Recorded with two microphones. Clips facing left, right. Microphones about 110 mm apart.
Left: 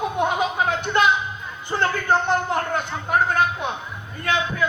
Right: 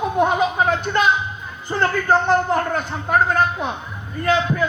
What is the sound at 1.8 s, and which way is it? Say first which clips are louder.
A man's voice: right 3 dB; 40° right (ahead or behind).